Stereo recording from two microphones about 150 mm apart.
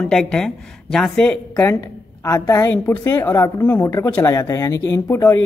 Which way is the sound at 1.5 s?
20° left (ahead or behind).